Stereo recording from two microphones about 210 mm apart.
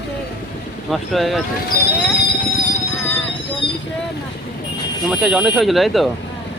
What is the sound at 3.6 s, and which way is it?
Vehicle, 25° left (ahead or behind).